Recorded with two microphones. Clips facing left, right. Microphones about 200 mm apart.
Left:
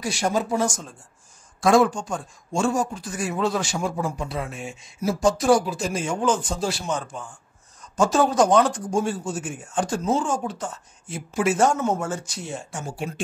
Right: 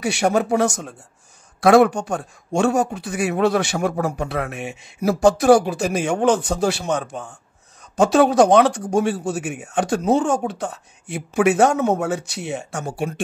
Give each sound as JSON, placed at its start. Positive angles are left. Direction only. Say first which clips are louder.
{"t": 0.0, "sound": "speech", "louder": "right 5 dB", "side_deg": -70}